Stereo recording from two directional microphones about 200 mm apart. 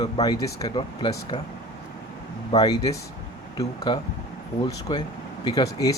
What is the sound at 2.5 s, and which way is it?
Speech, 25° left (ahead or behind).